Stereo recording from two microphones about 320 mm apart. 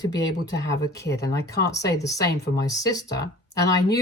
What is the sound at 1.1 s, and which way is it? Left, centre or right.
Speech, left.